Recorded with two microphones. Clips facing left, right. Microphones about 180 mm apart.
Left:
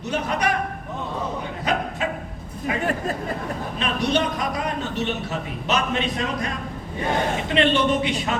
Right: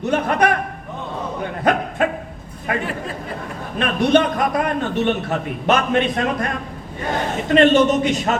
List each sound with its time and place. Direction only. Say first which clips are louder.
0.0 s a man's voice: right 6 dB; 55° right (ahead or behind)
1.4 s a sound: right 9 dB; 55° right (ahead or behind)
3.8 s a man's voice: right 7 dB; 55° right (ahead or behind)
7.4 s speech: right 9 dB; 45° right (ahead or behind)